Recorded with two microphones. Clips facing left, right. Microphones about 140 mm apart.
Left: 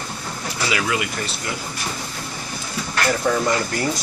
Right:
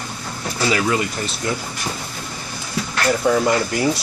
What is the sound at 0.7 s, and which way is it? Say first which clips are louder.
Speech: right 4 dB; 35° right (ahead or behind).